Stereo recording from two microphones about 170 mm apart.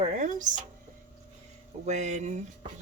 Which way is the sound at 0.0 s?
45° right (ahead or behind).